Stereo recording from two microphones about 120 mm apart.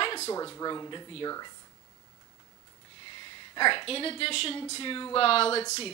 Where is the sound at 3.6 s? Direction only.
45° left (ahead or behind).